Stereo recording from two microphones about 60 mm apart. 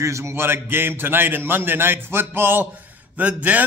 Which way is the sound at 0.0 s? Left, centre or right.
Right.